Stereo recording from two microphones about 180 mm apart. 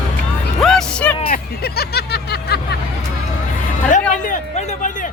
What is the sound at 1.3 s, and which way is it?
Speech, 60° left (ahead or behind).